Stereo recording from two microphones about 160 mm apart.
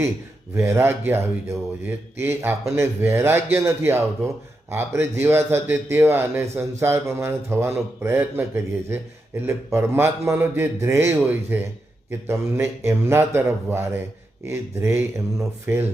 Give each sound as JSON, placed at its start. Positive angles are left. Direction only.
{"t": 0.5, "sound": "a man's voice", "side_deg": -15}